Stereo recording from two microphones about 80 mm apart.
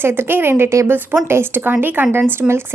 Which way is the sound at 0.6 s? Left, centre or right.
Right.